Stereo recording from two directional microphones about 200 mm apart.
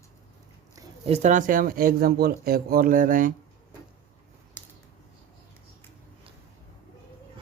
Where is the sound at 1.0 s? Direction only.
35° right (ahead or behind).